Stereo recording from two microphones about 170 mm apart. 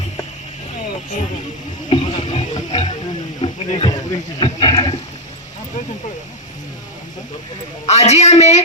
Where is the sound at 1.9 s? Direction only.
35° left (ahead or behind).